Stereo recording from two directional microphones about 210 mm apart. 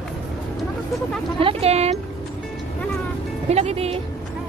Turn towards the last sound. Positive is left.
turn(degrees=-30)  # may be behind; listen again after turning